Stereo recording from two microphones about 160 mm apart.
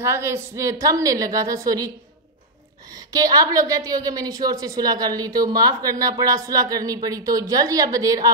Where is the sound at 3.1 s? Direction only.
25° right (ahead or behind).